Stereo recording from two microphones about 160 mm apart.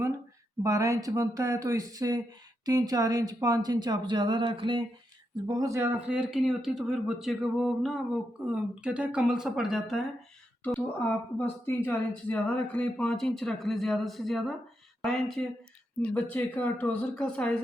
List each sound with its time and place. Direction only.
0.6 s speech: 20° right (ahead or behind)
5.5 s speech: 20° right (ahead or behind)
6.1 s speech: 5° right (ahead or behind)
10.6 s speech: 10° left (ahead or behind)